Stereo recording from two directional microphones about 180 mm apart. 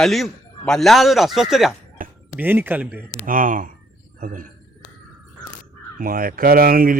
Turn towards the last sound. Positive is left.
turn(degrees=-55)  # may be behind; listen again after turning